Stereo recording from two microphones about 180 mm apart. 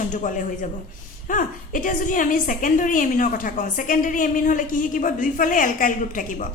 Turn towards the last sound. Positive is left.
turn(degrees=45)  # may be behind; listen again after turning